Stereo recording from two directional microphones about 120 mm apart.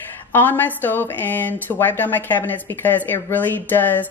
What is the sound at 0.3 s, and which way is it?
Speech, 15° left (ahead or behind).